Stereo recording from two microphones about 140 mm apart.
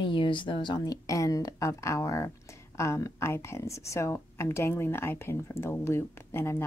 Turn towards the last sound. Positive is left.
turn(degrees=15)  # may be behind; listen again after turning